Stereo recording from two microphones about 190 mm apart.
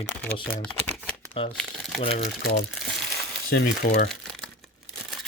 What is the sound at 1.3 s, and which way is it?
Speech, 30° left (ahead or behind).